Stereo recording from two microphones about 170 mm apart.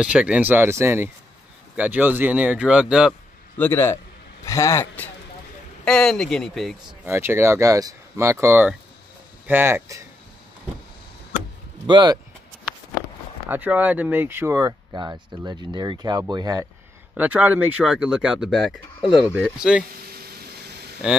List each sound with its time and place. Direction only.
0.0 s speech: 5° right (ahead or behind)
3.5 s speech: 15° left (ahead or behind)
7.1 s speech: 15° right (ahead or behind)
11.8 s speech: 25° right (ahead or behind)
13.5 s speech: 10° right (ahead or behind)
17.1 s speech: 10° right (ahead or behind)
20.1 s a sound: 65° right (ahead or behind)
21.0 s speech: 5° right (ahead or behind)